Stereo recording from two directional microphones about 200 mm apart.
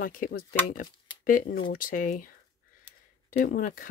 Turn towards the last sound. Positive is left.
turn(degrees=45)  # may be behind; listen again after turning